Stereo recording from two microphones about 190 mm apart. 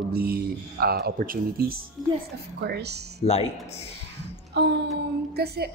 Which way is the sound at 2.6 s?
60° right (ahead or behind).